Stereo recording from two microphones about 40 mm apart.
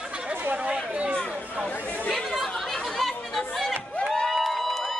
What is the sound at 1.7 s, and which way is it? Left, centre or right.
Chatter, left.